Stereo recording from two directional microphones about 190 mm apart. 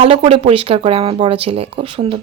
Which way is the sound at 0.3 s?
30° right (ahead or behind).